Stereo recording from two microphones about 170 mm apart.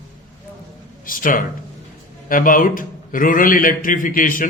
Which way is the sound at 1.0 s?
55° left (ahead or behind).